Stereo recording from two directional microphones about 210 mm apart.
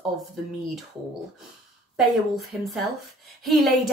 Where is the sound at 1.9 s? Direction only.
Centre (ahead or behind).